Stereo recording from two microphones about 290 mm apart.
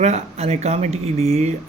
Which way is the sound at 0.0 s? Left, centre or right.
Right.